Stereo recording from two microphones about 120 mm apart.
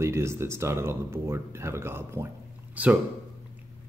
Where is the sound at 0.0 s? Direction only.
20° right (ahead or behind).